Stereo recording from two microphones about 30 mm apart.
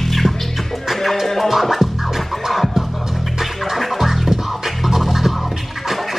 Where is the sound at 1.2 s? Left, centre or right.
Centre.